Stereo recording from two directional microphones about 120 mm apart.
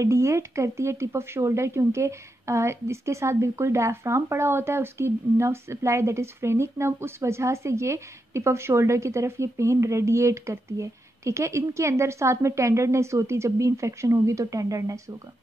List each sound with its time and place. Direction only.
0.0 s speech: 25° right (ahead or behind)